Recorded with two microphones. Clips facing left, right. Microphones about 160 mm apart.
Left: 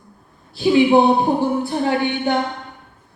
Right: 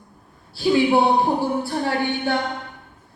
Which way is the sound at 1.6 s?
20° left (ahead or behind).